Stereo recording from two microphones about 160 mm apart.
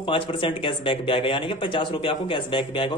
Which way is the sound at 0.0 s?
30° left (ahead or behind).